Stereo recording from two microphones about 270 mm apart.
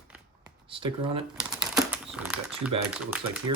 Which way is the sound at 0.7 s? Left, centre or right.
Centre.